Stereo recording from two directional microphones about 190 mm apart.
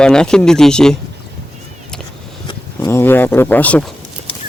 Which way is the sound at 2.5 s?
15° left (ahead or behind).